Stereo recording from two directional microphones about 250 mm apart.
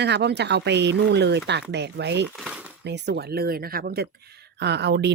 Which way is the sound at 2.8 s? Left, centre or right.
Right.